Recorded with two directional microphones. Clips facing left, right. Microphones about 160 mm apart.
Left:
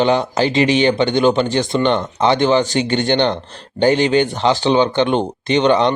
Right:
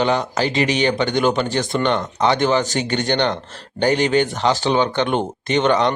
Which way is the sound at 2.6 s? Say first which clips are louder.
Left 4 dB; 45° right (ahead or behind).